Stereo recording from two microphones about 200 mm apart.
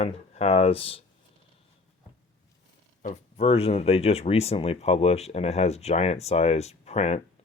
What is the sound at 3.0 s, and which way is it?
Speech, 35° left (ahead or behind).